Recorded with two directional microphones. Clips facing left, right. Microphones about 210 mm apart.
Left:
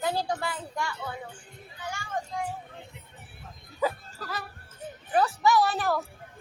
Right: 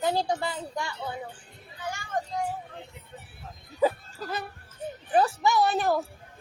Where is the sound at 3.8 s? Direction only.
20° right (ahead or behind).